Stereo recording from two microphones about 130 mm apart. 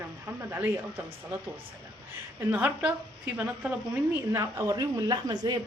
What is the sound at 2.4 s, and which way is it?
A woman's voice, 15° right (ahead or behind).